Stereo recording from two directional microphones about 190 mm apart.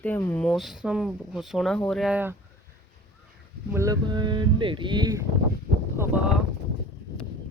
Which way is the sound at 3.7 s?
15° right (ahead or behind).